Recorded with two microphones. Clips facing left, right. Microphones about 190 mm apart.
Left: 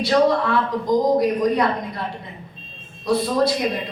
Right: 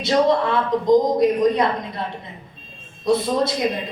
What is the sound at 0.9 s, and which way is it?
Speech, 20° right (ahead or behind).